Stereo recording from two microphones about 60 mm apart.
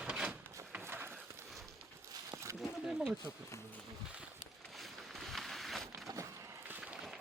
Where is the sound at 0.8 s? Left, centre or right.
Right.